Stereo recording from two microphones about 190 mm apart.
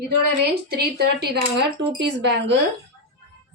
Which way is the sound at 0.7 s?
55° right (ahead or behind).